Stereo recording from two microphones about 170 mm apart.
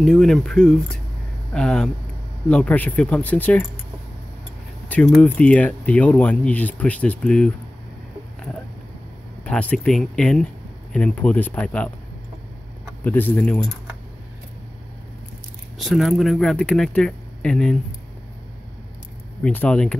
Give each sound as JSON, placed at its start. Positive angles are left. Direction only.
{"t": 0.0, "sound": "speech", "side_deg": 5}
{"t": 4.8, "sound": "a sound", "side_deg": 10}
{"t": 5.2, "sound": "speech", "side_deg": 10}
{"t": 9.4, "sound": "speech", "side_deg": 5}
{"t": 13.0, "sound": "speech", "side_deg": 10}
{"t": 15.8, "sound": "speech", "side_deg": 0}
{"t": 19.4, "sound": "speech", "side_deg": 10}